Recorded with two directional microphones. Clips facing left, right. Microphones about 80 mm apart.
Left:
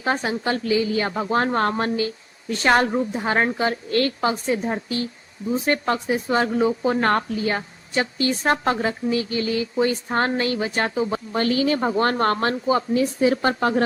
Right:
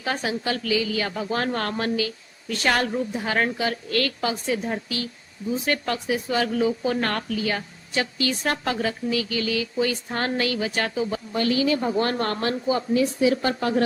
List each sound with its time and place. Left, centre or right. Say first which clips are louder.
0.0 s speech: left 3 dB; left